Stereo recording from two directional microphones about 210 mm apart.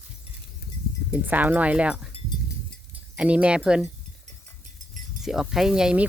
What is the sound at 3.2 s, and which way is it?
Speech, 5° right (ahead or behind).